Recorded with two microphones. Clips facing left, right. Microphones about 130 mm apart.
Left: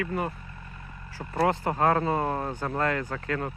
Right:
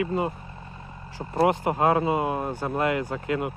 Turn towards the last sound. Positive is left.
turn(degrees=-15)  # may be behind; listen again after turning